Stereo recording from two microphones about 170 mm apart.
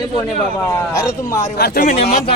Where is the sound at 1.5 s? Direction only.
70° left (ahead or behind).